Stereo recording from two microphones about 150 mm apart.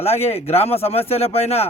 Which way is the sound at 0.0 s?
45° left (ahead or behind).